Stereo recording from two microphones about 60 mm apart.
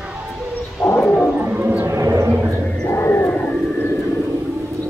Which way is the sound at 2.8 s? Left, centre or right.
Left.